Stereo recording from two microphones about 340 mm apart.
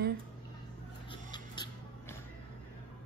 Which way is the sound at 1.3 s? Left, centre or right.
Centre.